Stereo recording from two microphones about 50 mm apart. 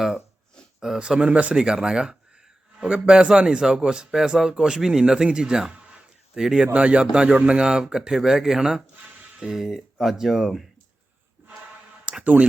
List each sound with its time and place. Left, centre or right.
0.8 s a man's voice: centre
6.7 s a man's voice: right; by 10.7 s centre
12.2 s speech: right